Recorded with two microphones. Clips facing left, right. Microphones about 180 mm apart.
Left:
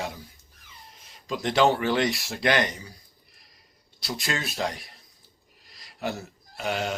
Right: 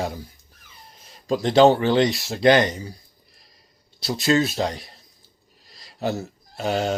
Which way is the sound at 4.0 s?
25° right (ahead or behind).